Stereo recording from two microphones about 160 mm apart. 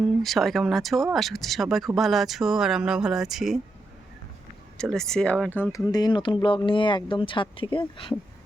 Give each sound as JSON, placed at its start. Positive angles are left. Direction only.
{"t": 0.2, "sound": "speech", "side_deg": 0}
{"t": 4.8, "sound": "speech", "side_deg": 5}
{"t": 5.9, "sound": "speech", "side_deg": 25}